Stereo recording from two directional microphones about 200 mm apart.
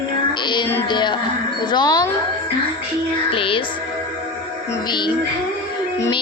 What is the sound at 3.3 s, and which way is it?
Music, 25° left (ahead or behind).